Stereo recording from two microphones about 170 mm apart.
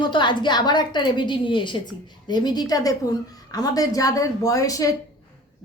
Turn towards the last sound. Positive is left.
turn(degrees=20)  # may be behind; listen again after turning